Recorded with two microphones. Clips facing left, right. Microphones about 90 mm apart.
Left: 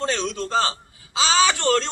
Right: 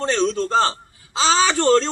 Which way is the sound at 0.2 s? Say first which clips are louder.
Right 5 dB; 35° right (ahead or behind).